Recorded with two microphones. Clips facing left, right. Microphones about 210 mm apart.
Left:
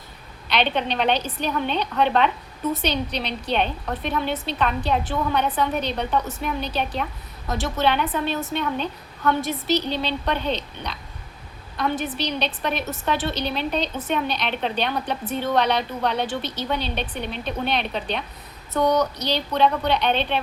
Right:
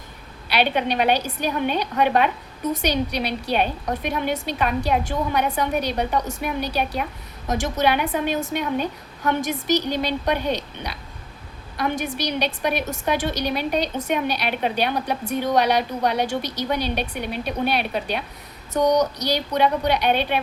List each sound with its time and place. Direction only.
0.4 s a woman's voice: 10° right (ahead or behind)